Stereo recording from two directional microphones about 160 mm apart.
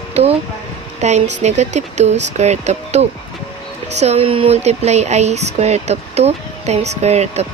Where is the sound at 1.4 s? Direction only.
45° right (ahead or behind).